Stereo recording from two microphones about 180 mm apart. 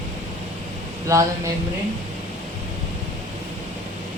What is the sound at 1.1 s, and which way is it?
Speech, 15° right (ahead or behind).